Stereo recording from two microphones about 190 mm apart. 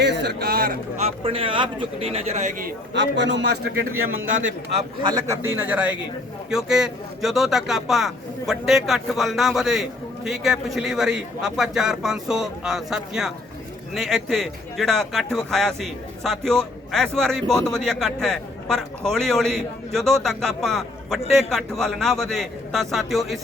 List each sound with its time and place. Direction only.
0.0 s a sound: 65° right (ahead or behind)
1.0 s speech: 30° right (ahead or behind)
2.6 s a man's voice: 70° right (ahead or behind); by 4.3 s 90° right
4.8 s speech: 25° right (ahead or behind)
5.3 s speech: 15° right (ahead or behind)